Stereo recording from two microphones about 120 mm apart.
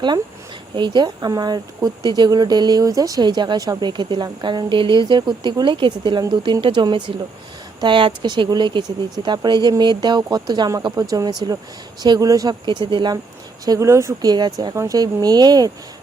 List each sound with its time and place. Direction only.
0.8 s speech: 40° right (ahead or behind)
13.7 s speech: 25° right (ahead or behind)